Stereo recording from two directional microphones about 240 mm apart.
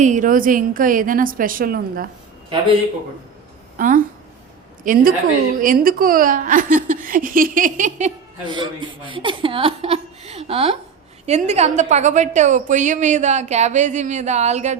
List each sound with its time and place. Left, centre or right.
0.0 s speech: right
3.8 s a woman's voice: right